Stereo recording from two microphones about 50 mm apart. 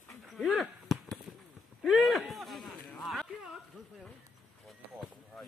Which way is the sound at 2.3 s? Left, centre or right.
Centre.